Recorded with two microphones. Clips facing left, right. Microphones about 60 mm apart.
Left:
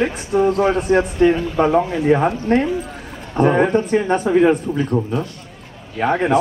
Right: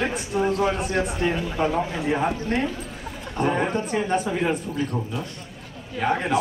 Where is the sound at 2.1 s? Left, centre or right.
Left.